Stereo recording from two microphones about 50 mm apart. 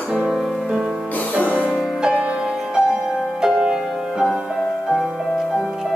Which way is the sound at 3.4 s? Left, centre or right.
Centre.